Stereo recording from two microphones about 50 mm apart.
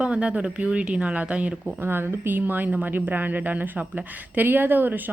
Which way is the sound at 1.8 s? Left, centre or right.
Right.